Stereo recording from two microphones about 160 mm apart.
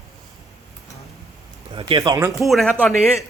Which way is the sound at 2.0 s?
20° right (ahead or behind).